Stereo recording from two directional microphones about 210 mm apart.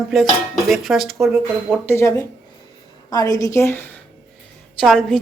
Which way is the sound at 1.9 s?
15° left (ahead or behind).